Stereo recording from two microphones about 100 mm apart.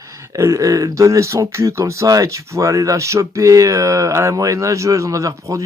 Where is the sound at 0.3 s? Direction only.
30° right (ahead or behind).